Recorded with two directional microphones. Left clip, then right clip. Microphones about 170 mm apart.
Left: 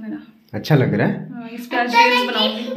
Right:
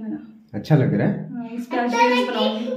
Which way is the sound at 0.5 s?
40° left (ahead or behind).